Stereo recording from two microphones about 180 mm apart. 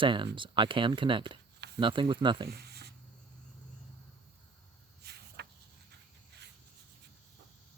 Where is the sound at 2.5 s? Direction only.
60° right (ahead or behind).